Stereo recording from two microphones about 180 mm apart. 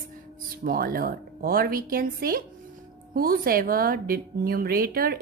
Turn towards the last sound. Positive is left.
turn(degrees=-55)  # may be behind; listen again after turning